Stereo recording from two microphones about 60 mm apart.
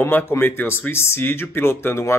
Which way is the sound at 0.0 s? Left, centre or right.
Left.